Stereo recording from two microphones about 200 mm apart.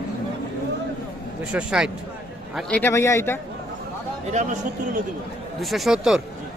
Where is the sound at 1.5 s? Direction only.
5° right (ahead or behind); by 3.4 s 10° left (ahead or behind).